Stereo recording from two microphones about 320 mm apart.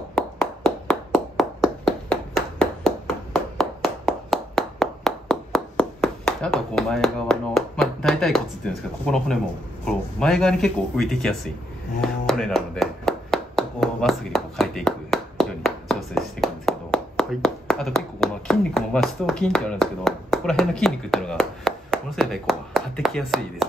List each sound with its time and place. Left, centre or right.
0.1 s a sound: centre
3.3 s clapping: centre
9.0 s speech: centre